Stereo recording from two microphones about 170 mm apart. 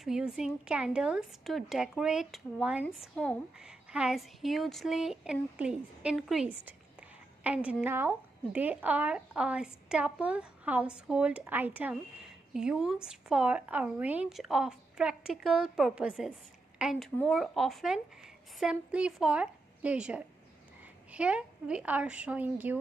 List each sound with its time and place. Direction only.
0.0 s a woman's voice: 5° right (ahead or behind)